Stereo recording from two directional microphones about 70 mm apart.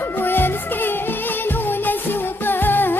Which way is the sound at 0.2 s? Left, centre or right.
Left.